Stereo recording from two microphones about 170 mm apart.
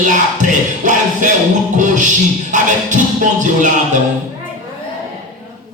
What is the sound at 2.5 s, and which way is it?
Music, 45° right (ahead or behind).